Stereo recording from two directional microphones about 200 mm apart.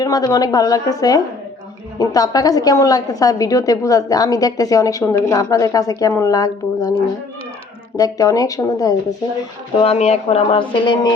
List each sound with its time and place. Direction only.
0.0 s a woman's voice: 20° left (ahead or behind)
7.9 s a woman's voice: 15° left (ahead or behind)
9.7 s speech: 30° left (ahead or behind)